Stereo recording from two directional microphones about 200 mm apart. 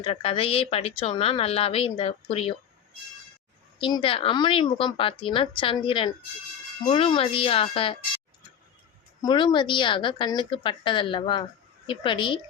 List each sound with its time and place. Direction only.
0.0 s speech: 30° left (ahead or behind)
3.8 s speech: 25° left (ahead or behind)
9.2 s speech: 20° left (ahead or behind)